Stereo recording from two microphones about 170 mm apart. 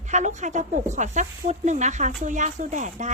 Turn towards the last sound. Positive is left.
turn(degrees=-45)  # may be behind; listen again after turning